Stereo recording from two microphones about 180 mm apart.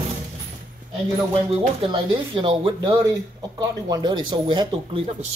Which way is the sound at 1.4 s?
25° right (ahead or behind).